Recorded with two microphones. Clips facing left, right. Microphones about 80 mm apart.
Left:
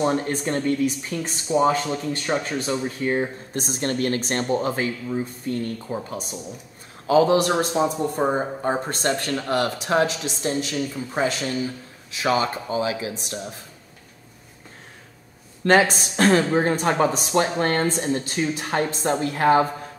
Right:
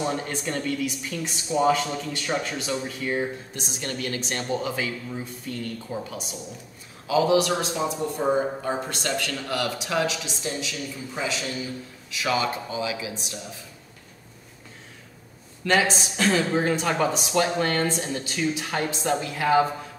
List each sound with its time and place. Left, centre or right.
0.0 s a man's voice: left
15.6 s speech: left
16.5 s a man's voice: left